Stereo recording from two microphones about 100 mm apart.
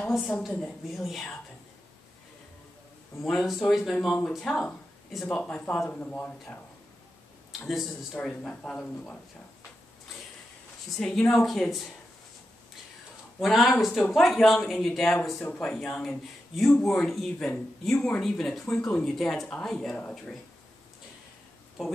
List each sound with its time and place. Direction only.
0.6 s speech: 5° left (ahead or behind)
3.2 s speech: centre (ahead or behind); by 6.6 s 15° left (ahead or behind)
8.1 s speech: 10° left (ahead or behind)
11.0 s speech: 5° left (ahead or behind)
13.4 s speech: centre (ahead or behind)